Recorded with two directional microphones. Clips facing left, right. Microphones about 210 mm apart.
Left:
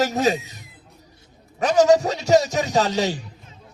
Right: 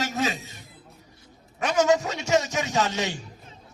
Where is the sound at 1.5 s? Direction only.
35° left (ahead or behind).